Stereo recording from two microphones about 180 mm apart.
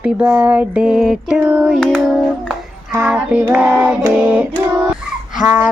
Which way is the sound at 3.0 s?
5° right (ahead or behind).